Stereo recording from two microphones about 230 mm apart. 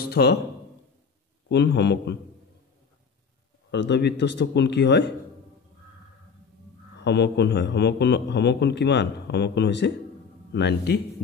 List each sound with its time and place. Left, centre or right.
0.0 s speech: left
1.5 s a man's voice: left
3.7 s a man's voice: left
7.0 s a man's voice: left